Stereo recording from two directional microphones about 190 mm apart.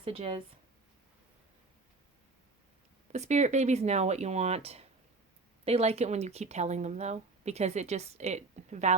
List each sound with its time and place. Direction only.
0.0 s speech: 30° right (ahead or behind)
3.1 s speech: 40° right (ahead or behind)